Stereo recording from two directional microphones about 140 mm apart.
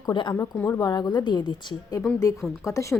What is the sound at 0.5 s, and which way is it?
Speech, 15° left (ahead or behind).